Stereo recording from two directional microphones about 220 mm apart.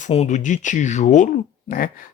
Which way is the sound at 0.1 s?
30° left (ahead or behind).